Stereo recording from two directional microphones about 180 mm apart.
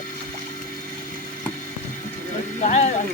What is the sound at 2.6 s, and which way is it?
Speech, 40° left (ahead or behind).